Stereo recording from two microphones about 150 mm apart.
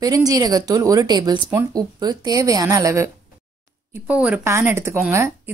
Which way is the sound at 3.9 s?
10° right (ahead or behind).